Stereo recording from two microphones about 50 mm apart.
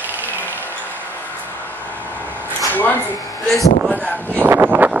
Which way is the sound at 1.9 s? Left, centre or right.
Left.